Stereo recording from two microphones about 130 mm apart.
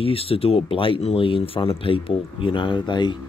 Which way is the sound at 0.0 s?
45° left (ahead or behind).